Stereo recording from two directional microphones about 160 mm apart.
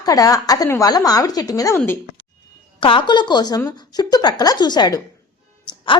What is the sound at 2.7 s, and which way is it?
A woman's voice, 30° left (ahead or behind).